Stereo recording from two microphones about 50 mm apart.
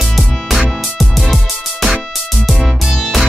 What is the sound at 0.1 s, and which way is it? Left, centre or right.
Music, centre.